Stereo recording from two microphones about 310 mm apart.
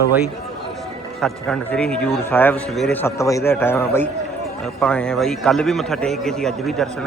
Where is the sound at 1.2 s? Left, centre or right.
Centre.